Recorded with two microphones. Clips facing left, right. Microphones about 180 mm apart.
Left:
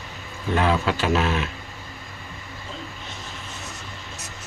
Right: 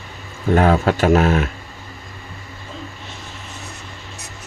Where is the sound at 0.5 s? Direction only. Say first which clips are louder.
Right 6 dB; 50° right (ahead or behind).